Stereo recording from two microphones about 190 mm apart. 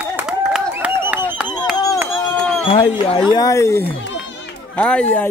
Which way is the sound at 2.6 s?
30° left (ahead or behind).